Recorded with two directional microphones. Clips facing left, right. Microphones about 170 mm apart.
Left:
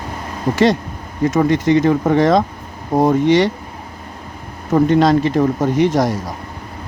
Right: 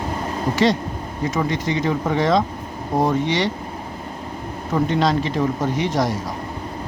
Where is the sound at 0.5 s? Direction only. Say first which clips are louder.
Left 5 dB; 50° left (ahead or behind).